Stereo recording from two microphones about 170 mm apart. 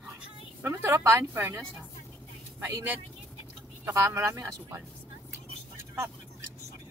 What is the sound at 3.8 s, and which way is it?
Speech, 15° right (ahead or behind).